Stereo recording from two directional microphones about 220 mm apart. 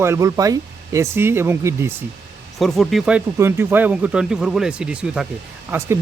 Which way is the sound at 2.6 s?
Centre (ahead or behind).